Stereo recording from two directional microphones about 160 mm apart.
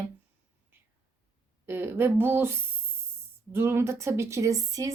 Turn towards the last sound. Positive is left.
turn(degrees=-20)  # may be behind; listen again after turning